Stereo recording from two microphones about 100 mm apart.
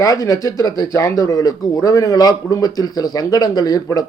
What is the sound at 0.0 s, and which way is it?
Speech, 35° left (ahead or behind).